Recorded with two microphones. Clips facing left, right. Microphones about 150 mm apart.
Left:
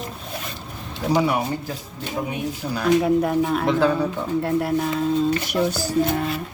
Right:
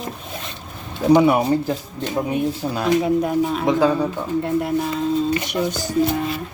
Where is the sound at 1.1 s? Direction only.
25° right (ahead or behind).